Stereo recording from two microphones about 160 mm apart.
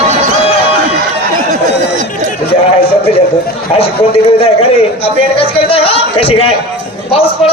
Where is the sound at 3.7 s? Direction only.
35° left (ahead or behind).